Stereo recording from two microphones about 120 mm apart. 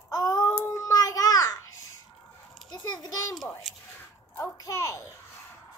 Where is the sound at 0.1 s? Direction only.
25° left (ahead or behind).